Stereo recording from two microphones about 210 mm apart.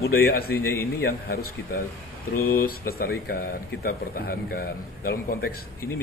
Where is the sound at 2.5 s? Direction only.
45° left (ahead or behind).